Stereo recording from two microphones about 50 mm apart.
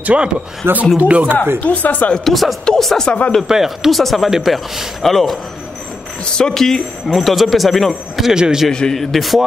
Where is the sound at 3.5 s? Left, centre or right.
Centre.